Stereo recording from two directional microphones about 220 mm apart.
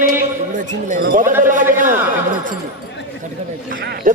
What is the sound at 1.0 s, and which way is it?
Speech, 40° right (ahead or behind).